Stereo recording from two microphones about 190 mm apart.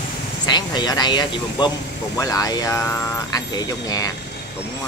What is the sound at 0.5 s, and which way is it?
Speech, 25° left (ahead or behind).